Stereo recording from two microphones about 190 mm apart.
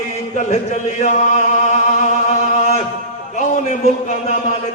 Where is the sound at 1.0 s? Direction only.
40° left (ahead or behind).